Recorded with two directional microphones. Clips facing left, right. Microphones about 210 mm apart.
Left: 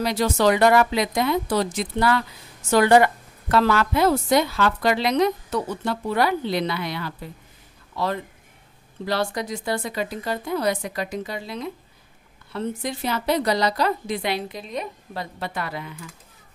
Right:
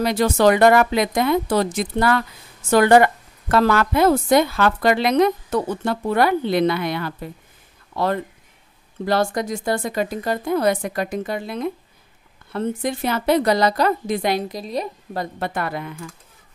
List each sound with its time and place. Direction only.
0.0 s a woman's voice: 55° right (ahead or behind); by 15.2 s 35° right (ahead or behind)
15.3 s a woman's voice: 50° right (ahead or behind)